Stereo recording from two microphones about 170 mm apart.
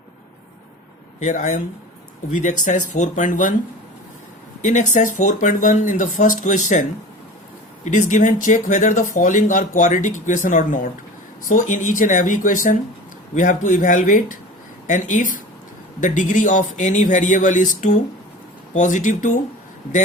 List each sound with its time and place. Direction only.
1.2 s speech: 45° left (ahead or behind)
4.6 s speech: 45° left (ahead or behind)
7.9 s speech: 45° left (ahead or behind)